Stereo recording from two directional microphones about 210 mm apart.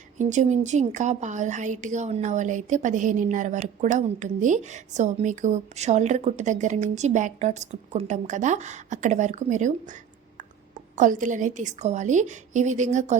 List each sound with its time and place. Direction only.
0.2 s a woman's voice: 35° right (ahead or behind)
10.9 s a woman's voice: 35° right (ahead or behind)